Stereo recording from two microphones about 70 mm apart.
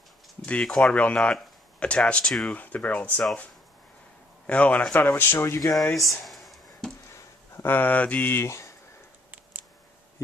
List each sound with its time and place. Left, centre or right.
0.5 s speech: centre
4.5 s speech: centre
5.0 s speech: left
6.2 s a sound: centre
7.6 s speech: left
9.3 s a sound: right